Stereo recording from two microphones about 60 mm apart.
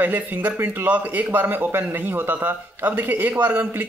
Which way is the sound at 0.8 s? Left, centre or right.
Right.